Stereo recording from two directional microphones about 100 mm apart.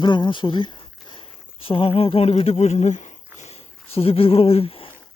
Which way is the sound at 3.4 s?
90° left.